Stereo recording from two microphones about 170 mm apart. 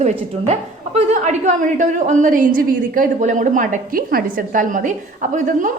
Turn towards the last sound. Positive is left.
turn(degrees=-50)  # may be behind; listen again after turning